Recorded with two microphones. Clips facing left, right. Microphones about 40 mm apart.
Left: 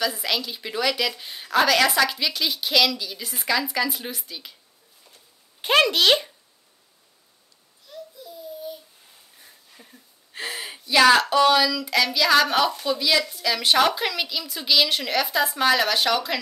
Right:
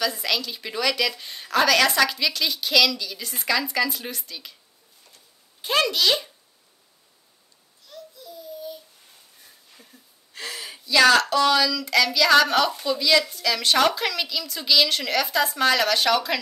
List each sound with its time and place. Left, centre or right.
0.0 s a woman's voice: centre
5.9 s a child's voice: left
7.9 s babbling: centre
9.4 s a woman's voice: centre